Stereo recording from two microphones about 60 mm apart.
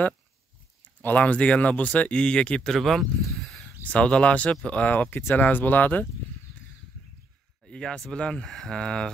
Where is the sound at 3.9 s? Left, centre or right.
Centre.